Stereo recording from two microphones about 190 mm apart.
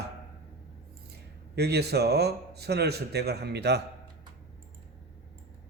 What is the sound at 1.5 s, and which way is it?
Speech, 60° right (ahead or behind).